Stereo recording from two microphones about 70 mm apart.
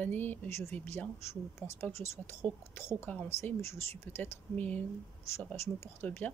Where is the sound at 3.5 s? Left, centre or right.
Left.